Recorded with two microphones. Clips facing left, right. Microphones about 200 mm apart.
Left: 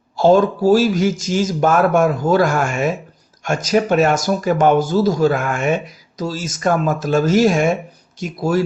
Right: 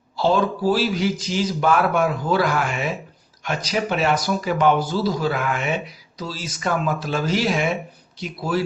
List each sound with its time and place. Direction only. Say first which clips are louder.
0.2 s speech: left 7 dB; 45° left (ahead or behind)